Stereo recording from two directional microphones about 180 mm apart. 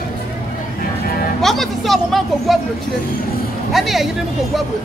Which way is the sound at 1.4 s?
Centre (ahead or behind).